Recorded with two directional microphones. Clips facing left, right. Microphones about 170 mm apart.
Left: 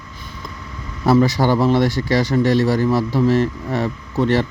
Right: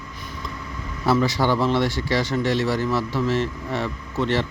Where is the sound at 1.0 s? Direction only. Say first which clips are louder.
Left 5 dB; 40° left (ahead or behind).